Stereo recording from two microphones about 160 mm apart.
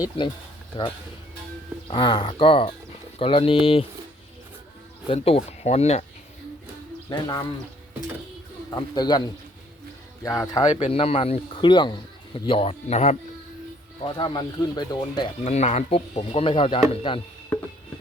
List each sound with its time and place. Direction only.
0.7 s a man's voice: 30° left (ahead or behind)
5.0 s a man's voice: 40° left (ahead or behind)
7.1 s speech: 25° left (ahead or behind)
8.7 s speech: 25° left (ahead or behind)
10.2 s speech: 20° left (ahead or behind)
10.7 s a man's voice: 45° left (ahead or behind)
14.0 s speech: 30° left (ahead or behind)
15.4 s a man's voice: 45° left (ahead or behind)